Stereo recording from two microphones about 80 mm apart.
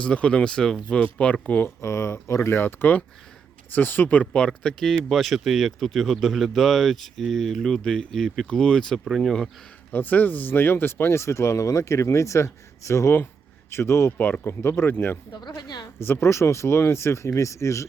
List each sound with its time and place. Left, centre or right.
0.0 s speech: centre
1.6 s speech: left; by 9.5 s centre
9.9 s speech: left
15.3 s speech: left
16.0 s speech: left